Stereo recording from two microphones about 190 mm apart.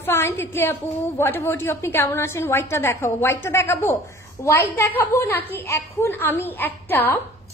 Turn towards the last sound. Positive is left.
turn(degrees=10)  # may be behind; listen again after turning